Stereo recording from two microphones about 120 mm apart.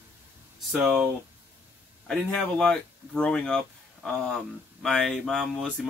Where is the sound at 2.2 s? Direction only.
5° left (ahead or behind).